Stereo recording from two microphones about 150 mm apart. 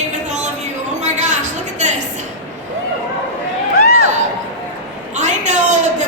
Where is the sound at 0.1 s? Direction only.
50° right (ahead or behind).